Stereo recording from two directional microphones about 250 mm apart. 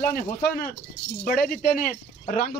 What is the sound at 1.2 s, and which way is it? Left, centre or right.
Speech, left.